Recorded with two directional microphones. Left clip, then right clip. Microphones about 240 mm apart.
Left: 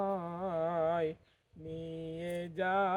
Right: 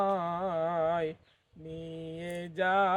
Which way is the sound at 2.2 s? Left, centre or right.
Right.